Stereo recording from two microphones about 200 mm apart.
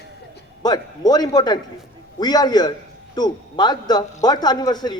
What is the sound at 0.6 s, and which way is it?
A man's voice, 20° left (ahead or behind).